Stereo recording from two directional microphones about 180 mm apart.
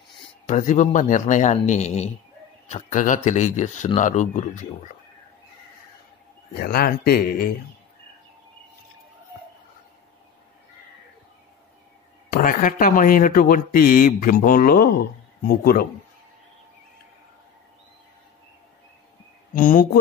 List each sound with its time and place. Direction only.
0.5 s speech: 40° left (ahead or behind)
6.5 s speech: 55° left (ahead or behind)
12.3 s speech: 50° left (ahead or behind)
19.5 s speech: 50° left (ahead or behind)